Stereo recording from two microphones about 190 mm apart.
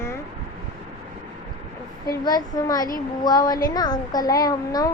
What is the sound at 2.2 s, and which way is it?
A child's voice, 20° left (ahead or behind).